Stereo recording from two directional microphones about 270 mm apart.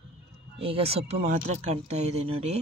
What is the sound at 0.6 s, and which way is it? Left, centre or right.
Speech, right.